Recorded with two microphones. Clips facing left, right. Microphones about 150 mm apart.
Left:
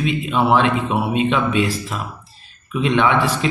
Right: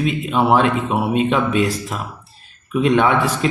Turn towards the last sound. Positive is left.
turn(degrees=-45)  # may be behind; listen again after turning